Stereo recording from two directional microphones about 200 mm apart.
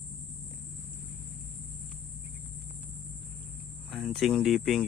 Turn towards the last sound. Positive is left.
turn(degrees=0)  # may be behind; listen again after turning